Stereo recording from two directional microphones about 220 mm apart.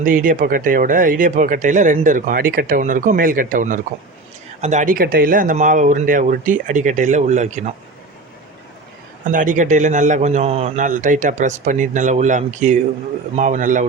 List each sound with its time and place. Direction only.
0.0 s speech: 35° right (ahead or behind)
9.2 s speech: 35° right (ahead or behind)